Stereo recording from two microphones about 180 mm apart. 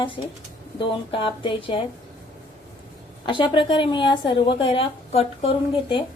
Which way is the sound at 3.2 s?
30° left (ahead or behind).